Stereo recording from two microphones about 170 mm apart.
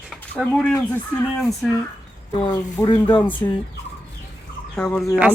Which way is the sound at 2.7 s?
20° left (ahead or behind).